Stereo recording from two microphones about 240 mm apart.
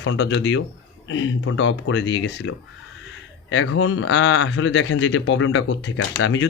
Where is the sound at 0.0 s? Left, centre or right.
Left.